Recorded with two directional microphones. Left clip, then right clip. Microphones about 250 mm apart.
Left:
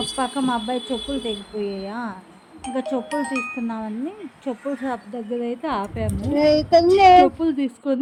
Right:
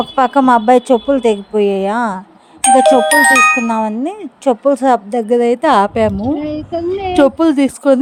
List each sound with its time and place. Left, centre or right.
0.2 s speech: right
6.7 s a child's voice: centre
7.3 s speech: right